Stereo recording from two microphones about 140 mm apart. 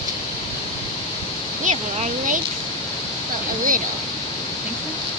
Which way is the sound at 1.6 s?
60° right (ahead or behind).